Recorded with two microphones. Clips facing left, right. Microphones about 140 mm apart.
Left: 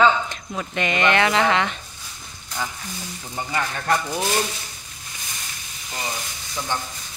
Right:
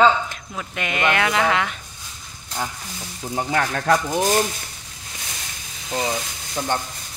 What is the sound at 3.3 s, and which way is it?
Speech, 75° right (ahead or behind).